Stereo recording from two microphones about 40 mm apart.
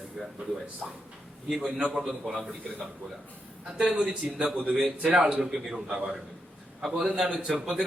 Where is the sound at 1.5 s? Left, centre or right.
Centre.